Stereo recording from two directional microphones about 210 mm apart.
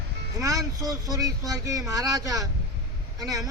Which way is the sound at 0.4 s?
15° right (ahead or behind).